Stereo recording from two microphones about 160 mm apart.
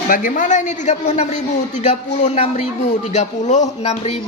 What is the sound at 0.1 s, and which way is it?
A man's voice, 60° left (ahead or behind).